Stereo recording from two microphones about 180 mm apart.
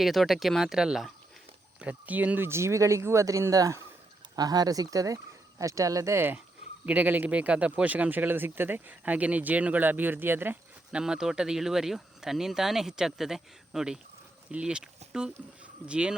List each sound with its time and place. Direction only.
0.0 s speech: centre (ahead or behind)